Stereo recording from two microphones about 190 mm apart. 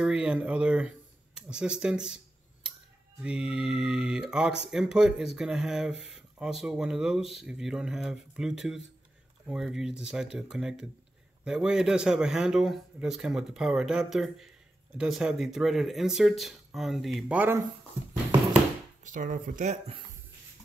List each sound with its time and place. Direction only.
0.0 s speech: 5° right (ahead or behind)
3.2 s a man's voice: 5° right (ahead or behind)
19.0 s speech: 45° right (ahead or behind)